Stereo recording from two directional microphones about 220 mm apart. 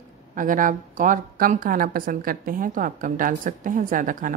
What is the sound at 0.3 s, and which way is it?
A woman's voice, 35° right (ahead or behind).